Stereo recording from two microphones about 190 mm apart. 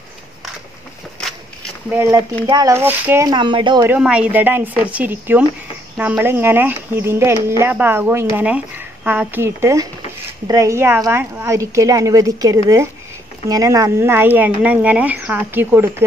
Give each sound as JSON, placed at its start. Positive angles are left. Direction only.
{"t": 1.9, "sound": "speech", "side_deg": -10}
{"t": 3.3, "sound": "speech", "side_deg": -25}
{"t": 3.8, "sound": "speech", "side_deg": -10}